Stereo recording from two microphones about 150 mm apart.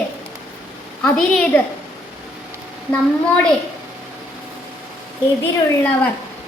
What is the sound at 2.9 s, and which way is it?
Speech, 10° left (ahead or behind).